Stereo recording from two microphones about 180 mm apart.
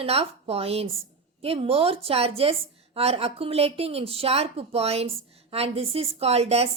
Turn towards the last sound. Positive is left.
turn(degrees=-35)  # may be behind; listen again after turning